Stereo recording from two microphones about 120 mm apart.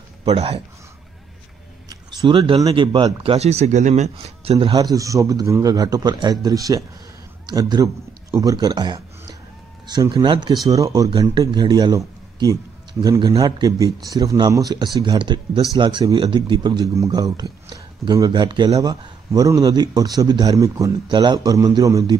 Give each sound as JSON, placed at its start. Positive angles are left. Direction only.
{"t": 0.2, "sound": "speech", "side_deg": -55}
{"t": 1.9, "sound": "a sound", "side_deg": -35}
{"t": 2.3, "sound": "speech", "side_deg": -45}
{"t": 3.3, "sound": "speech", "side_deg": -60}
{"t": 4.5, "sound": "speech", "side_deg": -50}
{"t": 4.7, "sound": "a man's voice", "side_deg": -30}
{"t": 21.1, "sound": "a man's voice", "side_deg": -40}